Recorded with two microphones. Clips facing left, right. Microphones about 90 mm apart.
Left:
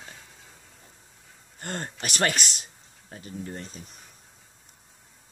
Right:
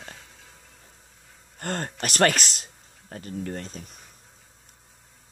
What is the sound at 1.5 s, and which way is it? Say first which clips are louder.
Speech: right 4 dB; 50° right (ahead or behind).